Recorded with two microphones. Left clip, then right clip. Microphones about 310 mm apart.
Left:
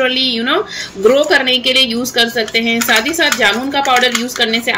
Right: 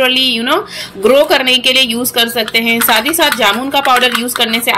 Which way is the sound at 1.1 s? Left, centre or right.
Centre.